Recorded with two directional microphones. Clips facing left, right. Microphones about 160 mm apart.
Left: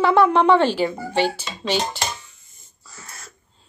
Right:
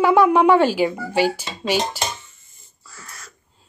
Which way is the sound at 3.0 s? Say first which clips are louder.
Even; 25° left (ahead or behind).